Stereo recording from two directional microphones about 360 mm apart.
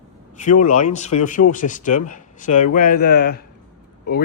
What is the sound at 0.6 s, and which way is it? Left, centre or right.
Speech, centre.